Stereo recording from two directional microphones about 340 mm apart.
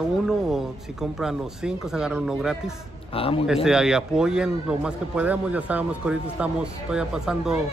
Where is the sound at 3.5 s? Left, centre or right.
Centre.